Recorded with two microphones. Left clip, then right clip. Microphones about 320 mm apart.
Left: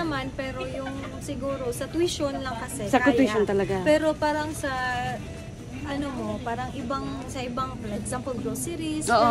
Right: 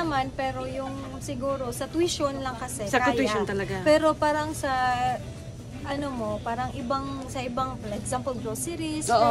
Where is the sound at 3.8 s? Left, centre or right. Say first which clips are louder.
Right 4 dB; centre.